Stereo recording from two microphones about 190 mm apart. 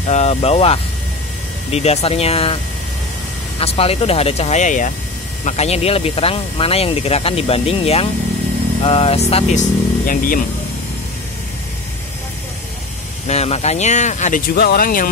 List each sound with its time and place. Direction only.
0.1 s speech: 35° left (ahead or behind)
3.5 s speech: 30° left (ahead or behind)
10.0 s speech: 45° left (ahead or behind)
13.3 s speech: 35° left (ahead or behind)